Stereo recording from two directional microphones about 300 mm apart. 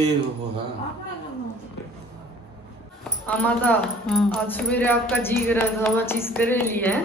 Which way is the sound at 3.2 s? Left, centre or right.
Centre.